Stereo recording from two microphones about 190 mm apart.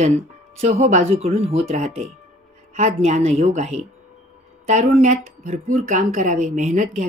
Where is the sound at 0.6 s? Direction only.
35° right (ahead or behind).